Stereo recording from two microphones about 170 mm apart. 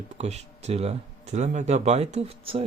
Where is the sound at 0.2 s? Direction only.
40° right (ahead or behind).